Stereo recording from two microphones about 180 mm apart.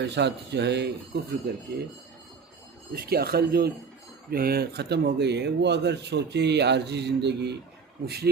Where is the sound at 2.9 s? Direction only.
55° right (ahead or behind).